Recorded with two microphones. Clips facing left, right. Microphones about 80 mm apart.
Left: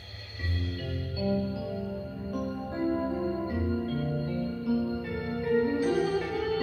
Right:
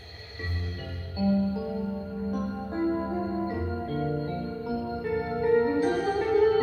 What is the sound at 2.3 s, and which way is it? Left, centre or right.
Music, right.